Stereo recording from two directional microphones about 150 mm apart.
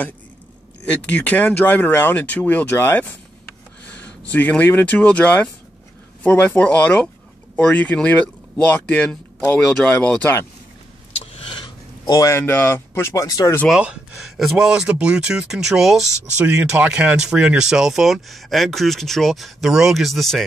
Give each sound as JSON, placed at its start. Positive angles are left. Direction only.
{"t": 0.8, "sound": "speech", "side_deg": 10}
{"t": 11.1, "sound": "speech", "side_deg": 40}
{"t": 13.7, "sound": "speech", "side_deg": -5}